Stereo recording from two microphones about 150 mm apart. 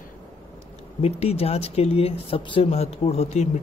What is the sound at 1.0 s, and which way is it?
Speech, 45° left (ahead or behind).